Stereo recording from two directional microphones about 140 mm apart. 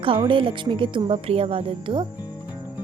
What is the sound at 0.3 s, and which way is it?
Speech, 40° right (ahead or behind).